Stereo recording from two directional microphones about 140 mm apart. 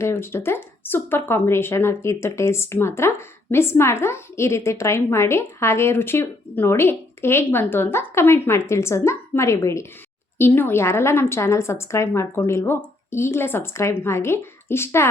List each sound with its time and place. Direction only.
0.0 s a woman's voice: 15° left (ahead or behind)